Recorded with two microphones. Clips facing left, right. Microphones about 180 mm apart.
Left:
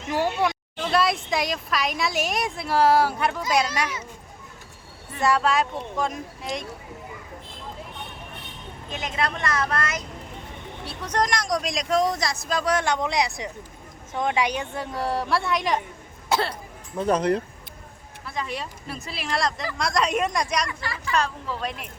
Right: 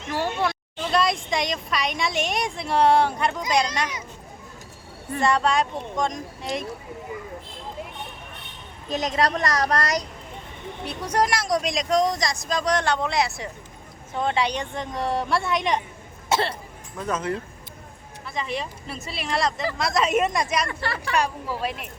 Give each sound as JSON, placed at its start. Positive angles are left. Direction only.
{"t": 0.1, "sound": "speech", "side_deg": 15}
{"t": 0.9, "sound": "speech", "side_deg": 5}
{"t": 5.2, "sound": "speech", "side_deg": 5}
{"t": 8.9, "sound": "a woman's voice", "side_deg": -40}
{"t": 10.8, "sound": "speech", "side_deg": -10}
{"t": 17.0, "sound": "speech", "side_deg": 35}
{"t": 18.3, "sound": "speech", "side_deg": 0}
{"t": 20.7, "sound": "speech", "side_deg": -65}
{"t": 21.2, "sound": "speech", "side_deg": -10}